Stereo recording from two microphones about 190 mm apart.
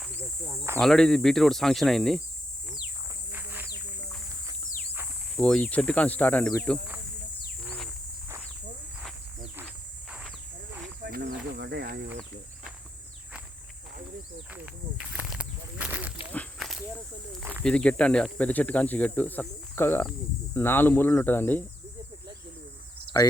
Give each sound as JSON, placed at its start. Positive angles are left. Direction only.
{"t": 0.0, "sound": "cricket", "side_deg": -10}
{"t": 0.8, "sound": "speech", "side_deg": 5}
{"t": 3.3, "sound": "cricket", "side_deg": -10}
{"t": 5.4, "sound": "speech", "side_deg": 5}
{"t": 9.0, "sound": "cricket", "side_deg": -5}
{"t": 10.1, "sound": "a sound", "side_deg": 0}
{"t": 11.0, "sound": "cricket", "side_deg": -55}
{"t": 14.5, "sound": "snake", "side_deg": -5}
{"t": 16.3, "sound": "walk", "side_deg": 5}
{"t": 17.6, "sound": "speech", "side_deg": 5}